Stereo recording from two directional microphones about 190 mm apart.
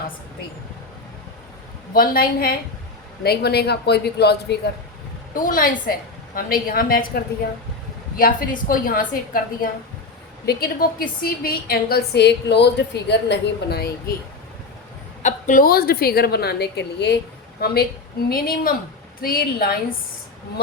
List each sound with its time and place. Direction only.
1.9 s a woman's voice: 50° left (ahead or behind)
5.3 s a woman's voice: 45° left (ahead or behind)
15.2 s a woman's voice: 40° left (ahead or behind); by 17.2 s 60° left (ahead or behind)
18.3 s a woman's voice: 50° left (ahead or behind)